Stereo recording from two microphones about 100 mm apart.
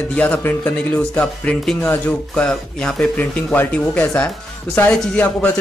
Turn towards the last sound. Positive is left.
turn(degrees=15)  # may be behind; listen again after turning